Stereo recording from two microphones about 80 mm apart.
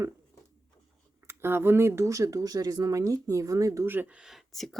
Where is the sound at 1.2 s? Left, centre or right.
Right.